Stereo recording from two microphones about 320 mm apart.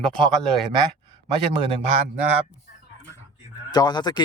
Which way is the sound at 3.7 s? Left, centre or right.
Centre.